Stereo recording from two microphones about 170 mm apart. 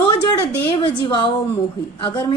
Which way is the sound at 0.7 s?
30° left (ahead or behind).